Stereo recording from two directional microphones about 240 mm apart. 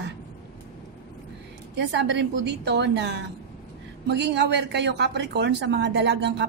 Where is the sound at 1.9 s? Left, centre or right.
Right.